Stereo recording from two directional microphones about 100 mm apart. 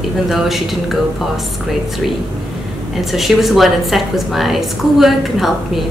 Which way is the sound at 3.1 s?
Centre (ahead or behind).